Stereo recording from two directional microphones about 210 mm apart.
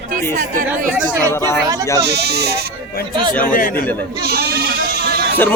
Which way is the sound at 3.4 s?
40° left (ahead or behind).